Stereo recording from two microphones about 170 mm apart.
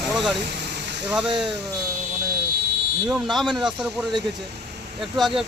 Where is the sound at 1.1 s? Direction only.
5° right (ahead or behind).